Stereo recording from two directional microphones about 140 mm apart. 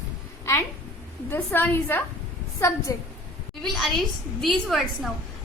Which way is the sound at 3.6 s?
Centre (ahead or behind).